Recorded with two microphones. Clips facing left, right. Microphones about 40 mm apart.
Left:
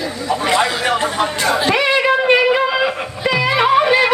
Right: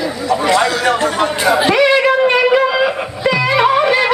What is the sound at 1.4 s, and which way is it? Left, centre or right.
Speech, centre.